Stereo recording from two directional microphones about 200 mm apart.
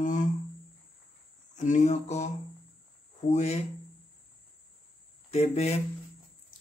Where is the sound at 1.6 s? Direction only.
35° left (ahead or behind).